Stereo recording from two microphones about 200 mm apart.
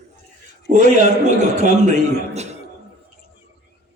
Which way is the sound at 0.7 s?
40° right (ahead or behind).